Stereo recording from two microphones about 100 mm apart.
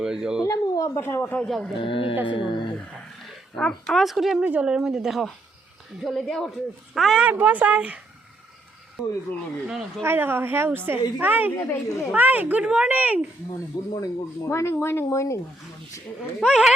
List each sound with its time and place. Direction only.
0.0 s speech: 5° right (ahead or behind)
0.4 s speech: 35° left (ahead or behind)
1.5 s speech: 5° left (ahead or behind)
1.8 s speech: 60° left (ahead or behind)
3.5 s speech: 5° left (ahead or behind)
7.3 s speech: 15° right (ahead or behind)
10.0 s speech: 20° right (ahead or behind)
11.5 s speech: 30° left (ahead or behind)
12.1 s speech: 15° right (ahead or behind)
13.9 s speech: 40° left (ahead or behind)
14.5 s speech: 25° left (ahead or behind)
16.4 s speech: 5° right (ahead or behind)